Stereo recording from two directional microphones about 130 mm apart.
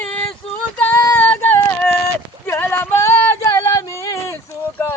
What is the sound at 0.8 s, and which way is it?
Child singing, 20° left (ahead or behind).